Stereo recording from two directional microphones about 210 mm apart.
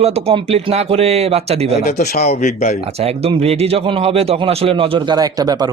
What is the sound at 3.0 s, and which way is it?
A man's voice, 30° right (ahead or behind).